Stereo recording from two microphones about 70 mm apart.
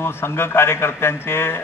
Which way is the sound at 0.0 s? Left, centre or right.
Left.